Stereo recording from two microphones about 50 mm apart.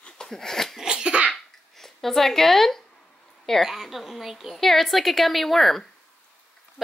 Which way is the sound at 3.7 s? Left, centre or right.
Centre.